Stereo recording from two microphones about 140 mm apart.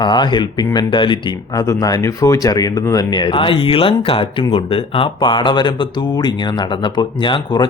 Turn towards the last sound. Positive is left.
turn(degrees=35)  # may be behind; listen again after turning